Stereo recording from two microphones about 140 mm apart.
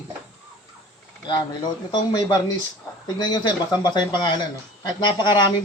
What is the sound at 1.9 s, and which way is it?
Speech, 30° left (ahead or behind).